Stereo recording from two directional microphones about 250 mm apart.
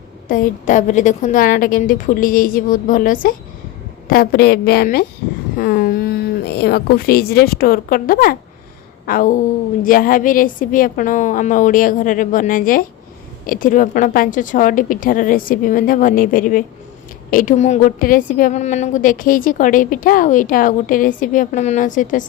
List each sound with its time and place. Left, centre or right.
0.3 s a woman's voice: left